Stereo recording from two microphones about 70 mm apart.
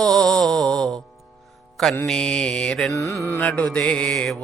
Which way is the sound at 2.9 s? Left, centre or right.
Left.